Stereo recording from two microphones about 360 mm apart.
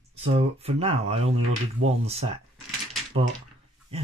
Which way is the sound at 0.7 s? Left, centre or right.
Centre.